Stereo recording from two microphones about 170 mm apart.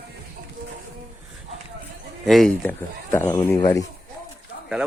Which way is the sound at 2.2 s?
Centre (ahead or behind).